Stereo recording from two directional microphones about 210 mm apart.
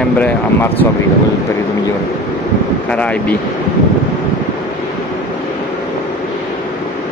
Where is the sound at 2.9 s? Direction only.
5° left (ahead or behind).